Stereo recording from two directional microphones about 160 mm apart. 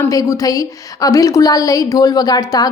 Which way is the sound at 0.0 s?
20° left (ahead or behind).